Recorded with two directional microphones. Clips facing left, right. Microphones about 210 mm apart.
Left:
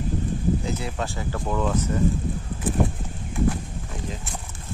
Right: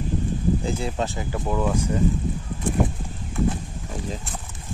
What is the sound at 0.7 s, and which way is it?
Speech, 25° right (ahead or behind).